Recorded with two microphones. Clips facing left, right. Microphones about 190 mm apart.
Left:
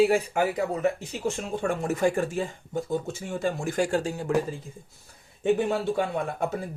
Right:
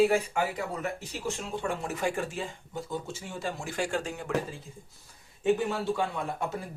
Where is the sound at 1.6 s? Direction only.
45° left (ahead or behind).